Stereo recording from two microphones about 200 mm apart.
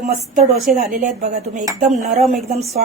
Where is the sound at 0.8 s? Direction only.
40° right (ahead or behind).